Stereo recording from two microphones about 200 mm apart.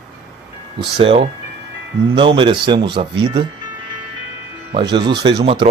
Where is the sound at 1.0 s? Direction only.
25° right (ahead or behind).